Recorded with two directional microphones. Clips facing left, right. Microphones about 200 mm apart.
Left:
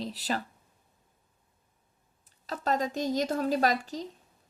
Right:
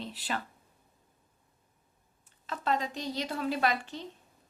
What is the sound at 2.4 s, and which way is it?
Speech, 40° left (ahead or behind).